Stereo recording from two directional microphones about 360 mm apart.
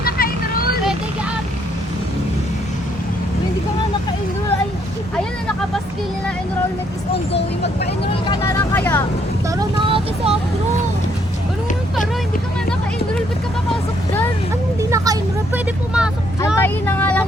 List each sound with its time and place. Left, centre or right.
0.0 s vehicle: left
7.1 s vehicle: left
7.9 s vehicle: centre
9.6 s vehicle: centre
14.8 s vehicle: centre